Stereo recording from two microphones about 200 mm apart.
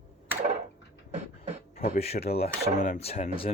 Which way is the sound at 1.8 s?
50° left (ahead or behind).